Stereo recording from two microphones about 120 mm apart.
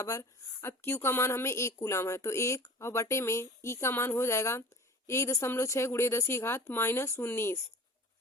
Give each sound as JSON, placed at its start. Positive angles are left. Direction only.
{"t": 0.0, "sound": "a woman's voice", "side_deg": 25}